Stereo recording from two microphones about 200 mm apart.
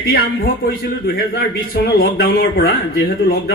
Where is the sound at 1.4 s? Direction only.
50° left (ahead or behind).